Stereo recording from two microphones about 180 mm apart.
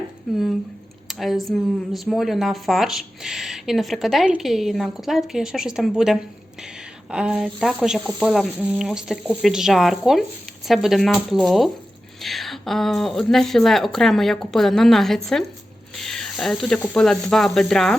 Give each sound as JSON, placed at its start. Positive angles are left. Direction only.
{"t": 1.0, "sound": "speech", "side_deg": 0}